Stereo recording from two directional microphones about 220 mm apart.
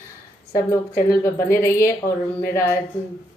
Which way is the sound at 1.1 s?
15° left (ahead or behind).